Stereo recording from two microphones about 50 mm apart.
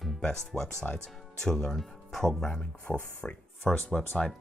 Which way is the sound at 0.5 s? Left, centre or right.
Centre.